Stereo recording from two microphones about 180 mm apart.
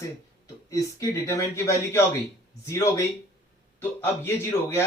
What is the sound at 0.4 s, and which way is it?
Speech, 20° left (ahead or behind).